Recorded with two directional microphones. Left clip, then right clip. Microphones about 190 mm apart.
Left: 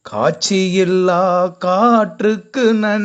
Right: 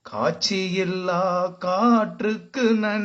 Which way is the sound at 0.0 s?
35° left (ahead or behind).